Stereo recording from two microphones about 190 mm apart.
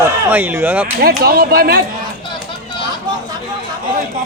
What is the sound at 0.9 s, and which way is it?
Speech, 55° right (ahead or behind).